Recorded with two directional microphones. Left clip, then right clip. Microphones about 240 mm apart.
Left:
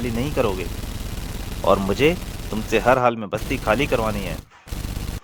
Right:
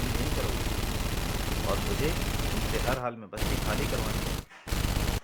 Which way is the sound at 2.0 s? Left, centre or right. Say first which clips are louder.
Left 11 dB; left.